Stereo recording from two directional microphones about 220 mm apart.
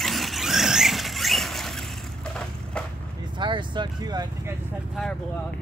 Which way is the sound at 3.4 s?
20° right (ahead or behind).